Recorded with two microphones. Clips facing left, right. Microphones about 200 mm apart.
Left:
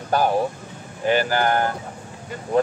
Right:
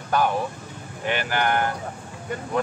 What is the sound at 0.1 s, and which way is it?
Speech, 35° left (ahead or behind).